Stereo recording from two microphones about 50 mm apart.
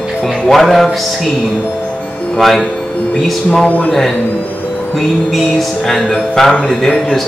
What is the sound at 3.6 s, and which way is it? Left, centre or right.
Speech, left.